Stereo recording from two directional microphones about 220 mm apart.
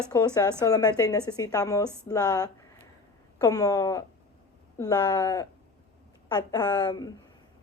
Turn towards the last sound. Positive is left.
turn(degrees=20)  # may be behind; listen again after turning